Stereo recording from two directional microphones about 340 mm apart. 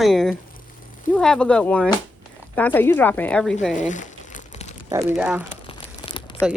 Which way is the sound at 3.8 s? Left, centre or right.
Left.